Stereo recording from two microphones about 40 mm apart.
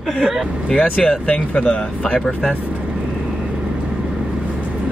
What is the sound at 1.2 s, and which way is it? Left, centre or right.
Speech, left.